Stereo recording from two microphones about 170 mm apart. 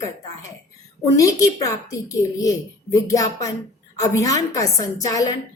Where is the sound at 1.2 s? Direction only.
20° left (ahead or behind).